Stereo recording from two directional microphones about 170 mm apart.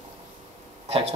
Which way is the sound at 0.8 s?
35° right (ahead or behind).